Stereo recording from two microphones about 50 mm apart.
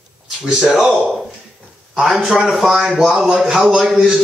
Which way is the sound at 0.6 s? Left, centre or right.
Centre.